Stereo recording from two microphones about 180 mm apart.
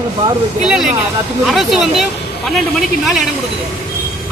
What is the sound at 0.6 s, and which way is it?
Speech, 5° right (ahead or behind).